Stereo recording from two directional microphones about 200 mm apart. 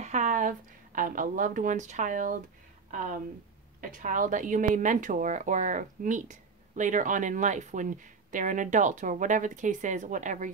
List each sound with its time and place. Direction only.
0.0 s a woman's voice: 35° right (ahead or behind)